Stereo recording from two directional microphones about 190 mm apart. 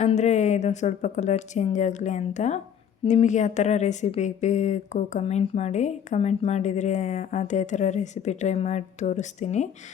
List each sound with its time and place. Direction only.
0.0 s a woman's voice: 35° left (ahead or behind)